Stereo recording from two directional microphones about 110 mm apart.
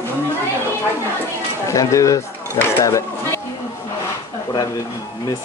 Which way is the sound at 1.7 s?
30° left (ahead or behind).